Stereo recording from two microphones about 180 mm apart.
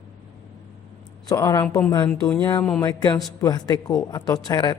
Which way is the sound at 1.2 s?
20° left (ahead or behind).